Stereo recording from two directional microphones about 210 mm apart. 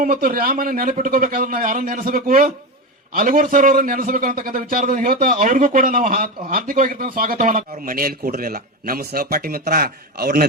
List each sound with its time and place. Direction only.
0.0 s a man's voice: 40° right (ahead or behind)